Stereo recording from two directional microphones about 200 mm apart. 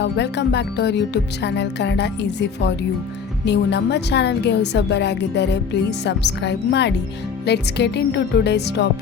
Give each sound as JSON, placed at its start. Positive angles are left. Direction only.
{"t": 0.0, "sound": "a woman's voice", "side_deg": 60}